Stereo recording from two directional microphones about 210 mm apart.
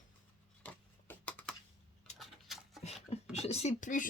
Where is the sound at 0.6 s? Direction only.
5° left (ahead or behind).